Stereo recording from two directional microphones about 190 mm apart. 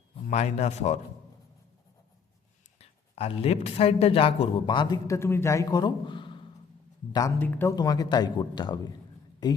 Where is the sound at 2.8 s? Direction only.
30° left (ahead or behind).